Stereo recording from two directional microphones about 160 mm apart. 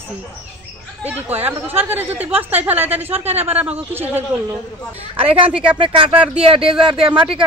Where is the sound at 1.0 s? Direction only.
10° right (ahead or behind).